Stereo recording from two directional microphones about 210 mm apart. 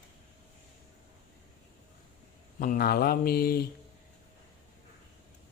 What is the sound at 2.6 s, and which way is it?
A woman's voice, 45° left (ahead or behind).